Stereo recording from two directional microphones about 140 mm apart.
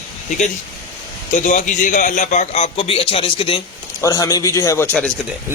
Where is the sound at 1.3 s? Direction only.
65° left (ahead or behind); by 3.6 s 40° left (ahead or behind).